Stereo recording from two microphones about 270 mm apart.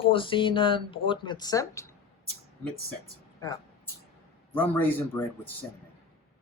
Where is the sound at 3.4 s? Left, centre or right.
Centre.